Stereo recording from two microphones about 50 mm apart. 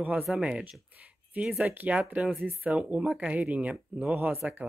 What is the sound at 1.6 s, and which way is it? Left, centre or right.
Speech, right.